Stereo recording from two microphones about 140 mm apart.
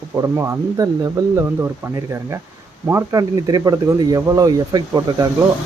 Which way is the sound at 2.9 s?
25° right (ahead or behind).